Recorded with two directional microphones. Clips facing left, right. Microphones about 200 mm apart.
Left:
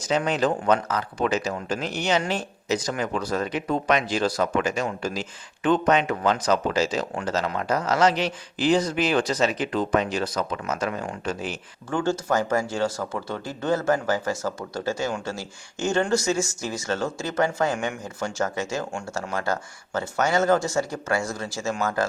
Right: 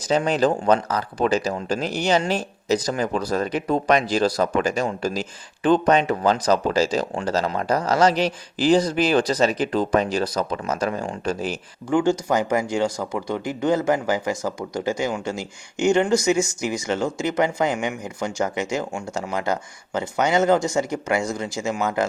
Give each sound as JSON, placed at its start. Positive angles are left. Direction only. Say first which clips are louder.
{"t": 0.1, "sound": "speech", "louder": "right 3 dB", "side_deg": -35}
{"t": 11.9, "sound": "speech", "louder": "right 4 dB", "side_deg": -15}